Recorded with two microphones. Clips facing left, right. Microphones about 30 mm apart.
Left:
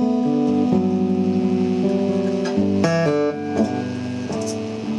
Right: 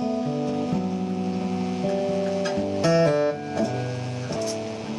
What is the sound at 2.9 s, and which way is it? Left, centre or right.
Music, centre.